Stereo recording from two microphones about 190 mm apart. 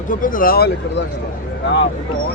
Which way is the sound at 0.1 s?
45° left (ahead or behind).